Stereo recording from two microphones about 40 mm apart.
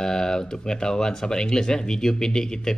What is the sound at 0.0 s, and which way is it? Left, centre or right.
Speech, centre.